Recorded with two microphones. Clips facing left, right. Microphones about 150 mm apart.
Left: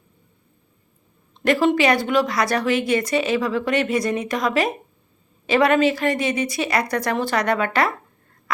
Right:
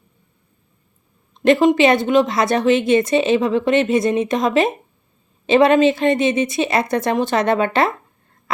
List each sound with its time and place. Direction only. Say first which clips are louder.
1.3 s a woman's voice: right 5 dB; 20° right (ahead or behind)